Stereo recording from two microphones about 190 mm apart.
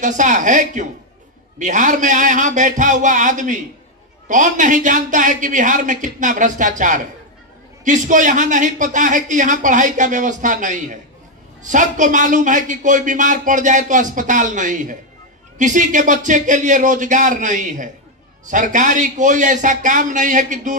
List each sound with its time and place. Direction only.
0.0 s a man's voice: 40° right (ahead or behind)